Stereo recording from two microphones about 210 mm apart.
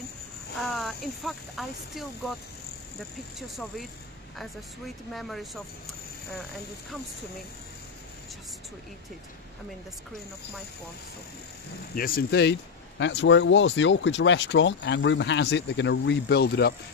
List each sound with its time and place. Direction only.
0.6 s speech: centre (ahead or behind)
3.3 s speech: centre (ahead or behind)
5.1 s speech: centre (ahead or behind)
11.9 s speech: 45° left (ahead or behind)